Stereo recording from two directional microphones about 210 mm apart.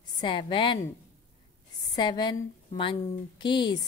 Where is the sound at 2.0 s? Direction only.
20° left (ahead or behind).